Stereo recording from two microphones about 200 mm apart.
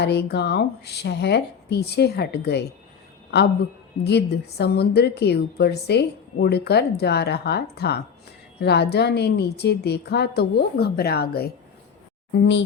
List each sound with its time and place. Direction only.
0.0 s a woman's voice: 55° left (ahead or behind)
4.0 s a woman's voice: 55° left (ahead or behind)